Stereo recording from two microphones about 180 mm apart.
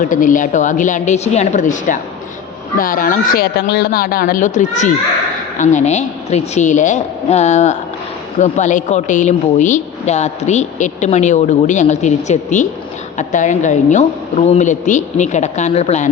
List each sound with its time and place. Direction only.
0.0 s a woman's voice: 50° left (ahead or behind)